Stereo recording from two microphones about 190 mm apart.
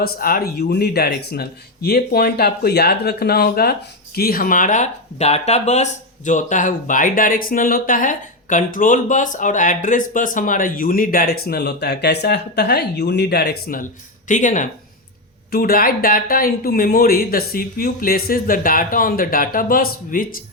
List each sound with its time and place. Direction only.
0.0 s speech: 50° left (ahead or behind)